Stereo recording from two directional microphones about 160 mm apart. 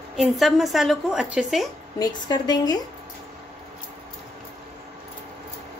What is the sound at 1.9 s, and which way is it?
Speech, 25° left (ahead or behind).